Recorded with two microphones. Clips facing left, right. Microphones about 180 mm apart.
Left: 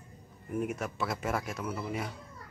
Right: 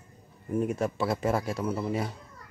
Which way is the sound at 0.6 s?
30° right (ahead or behind).